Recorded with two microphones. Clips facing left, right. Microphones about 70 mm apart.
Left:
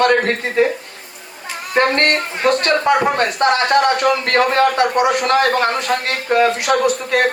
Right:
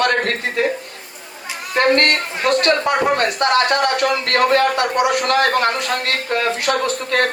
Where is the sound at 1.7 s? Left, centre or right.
Left.